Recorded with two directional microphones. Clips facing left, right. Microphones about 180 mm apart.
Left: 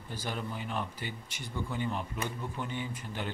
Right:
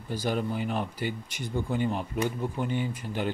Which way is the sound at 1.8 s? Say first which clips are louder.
Right 6 dB; 15° right (ahead or behind).